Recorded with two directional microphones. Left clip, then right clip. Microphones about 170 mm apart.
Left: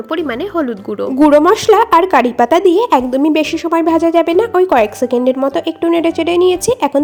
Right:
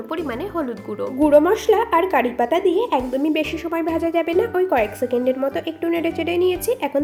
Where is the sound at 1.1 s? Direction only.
55° left (ahead or behind).